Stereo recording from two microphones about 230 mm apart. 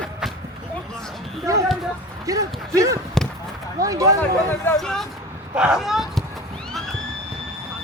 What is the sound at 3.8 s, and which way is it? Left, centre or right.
Speech, centre.